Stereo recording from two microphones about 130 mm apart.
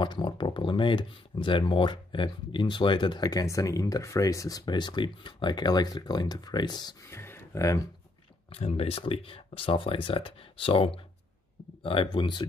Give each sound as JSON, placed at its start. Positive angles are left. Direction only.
{"t": 0.0, "sound": "speech", "side_deg": 35}
{"t": 7.2, "sound": "a sound", "side_deg": 20}
{"t": 8.5, "sound": "speech", "side_deg": 50}